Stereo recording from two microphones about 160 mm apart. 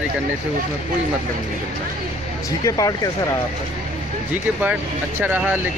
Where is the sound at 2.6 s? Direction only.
20° left (ahead or behind).